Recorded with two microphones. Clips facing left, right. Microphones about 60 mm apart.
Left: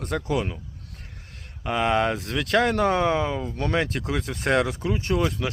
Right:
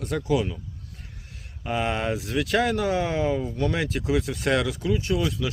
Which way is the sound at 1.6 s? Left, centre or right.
Left.